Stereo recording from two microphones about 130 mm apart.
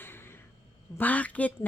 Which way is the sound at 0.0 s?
15° left (ahead or behind).